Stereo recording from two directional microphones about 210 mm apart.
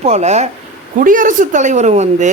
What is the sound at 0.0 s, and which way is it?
A woman's voice, 30° right (ahead or behind).